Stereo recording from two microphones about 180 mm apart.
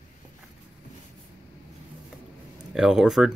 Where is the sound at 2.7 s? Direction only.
Centre (ahead or behind).